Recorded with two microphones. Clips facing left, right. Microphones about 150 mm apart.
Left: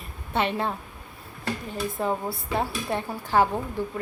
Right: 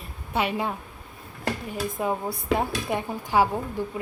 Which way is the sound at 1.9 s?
15° right (ahead or behind).